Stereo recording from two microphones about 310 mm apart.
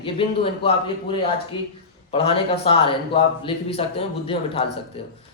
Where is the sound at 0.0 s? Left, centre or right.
Centre.